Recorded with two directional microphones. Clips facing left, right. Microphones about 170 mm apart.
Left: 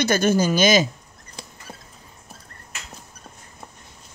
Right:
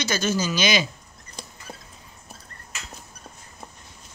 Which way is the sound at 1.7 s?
5° left (ahead or behind).